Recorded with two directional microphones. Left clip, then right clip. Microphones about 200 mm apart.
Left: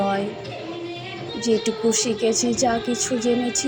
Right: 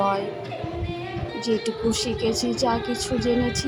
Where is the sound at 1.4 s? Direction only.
Centre (ahead or behind).